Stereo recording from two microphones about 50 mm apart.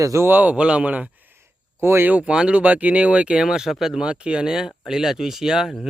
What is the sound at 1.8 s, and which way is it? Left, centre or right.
Speech, right.